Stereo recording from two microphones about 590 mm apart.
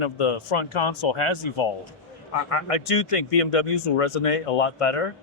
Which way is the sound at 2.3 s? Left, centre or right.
Left.